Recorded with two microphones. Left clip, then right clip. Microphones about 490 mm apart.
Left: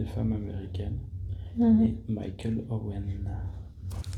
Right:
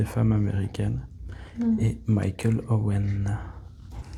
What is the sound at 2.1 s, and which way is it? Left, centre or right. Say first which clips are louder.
Speech: right 6 dB; right.